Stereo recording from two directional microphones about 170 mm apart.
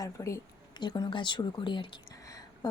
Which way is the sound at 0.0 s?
15° left (ahead or behind).